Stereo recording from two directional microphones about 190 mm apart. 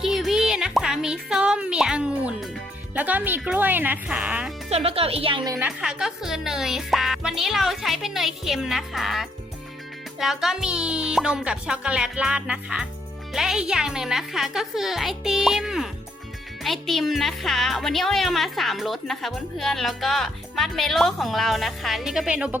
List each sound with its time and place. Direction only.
0.0 s speech: centre (ahead or behind)
4.7 s speech: 30° right (ahead or behind)
5.5 s speech: 10° right (ahead or behind)